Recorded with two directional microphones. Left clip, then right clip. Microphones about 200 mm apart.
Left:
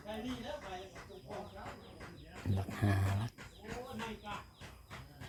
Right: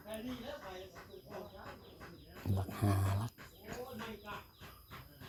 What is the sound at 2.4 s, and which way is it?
Roaring cats, 15° right (ahead or behind).